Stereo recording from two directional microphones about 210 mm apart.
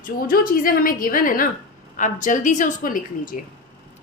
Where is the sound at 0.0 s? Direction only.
40° left (ahead or behind).